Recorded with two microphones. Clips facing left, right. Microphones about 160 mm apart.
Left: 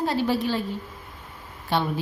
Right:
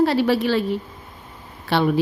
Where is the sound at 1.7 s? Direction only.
75° right (ahead or behind).